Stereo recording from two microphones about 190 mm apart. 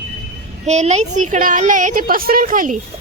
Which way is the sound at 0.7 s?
35° right (ahead or behind).